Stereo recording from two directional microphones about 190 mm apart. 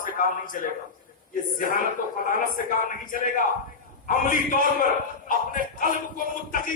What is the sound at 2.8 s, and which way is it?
A man's voice, 45° left (ahead or behind).